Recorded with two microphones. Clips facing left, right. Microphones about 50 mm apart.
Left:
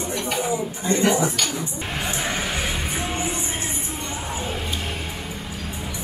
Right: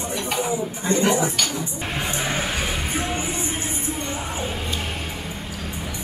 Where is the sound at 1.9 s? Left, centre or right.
Right.